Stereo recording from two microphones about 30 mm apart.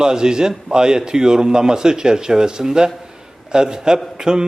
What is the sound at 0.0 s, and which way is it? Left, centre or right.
A man's voice, right.